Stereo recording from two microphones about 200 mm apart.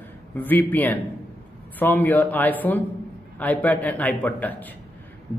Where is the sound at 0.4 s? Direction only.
10° left (ahead or behind).